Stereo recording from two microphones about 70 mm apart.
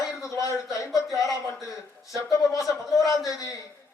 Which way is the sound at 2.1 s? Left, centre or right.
Left.